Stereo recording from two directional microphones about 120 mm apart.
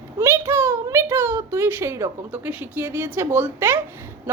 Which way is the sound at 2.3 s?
15° right (ahead or behind).